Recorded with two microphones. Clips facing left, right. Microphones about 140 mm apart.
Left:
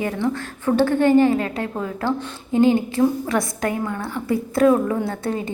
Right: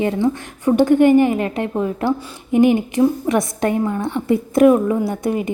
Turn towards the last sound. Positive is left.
turn(degrees=-15)  # may be behind; listen again after turning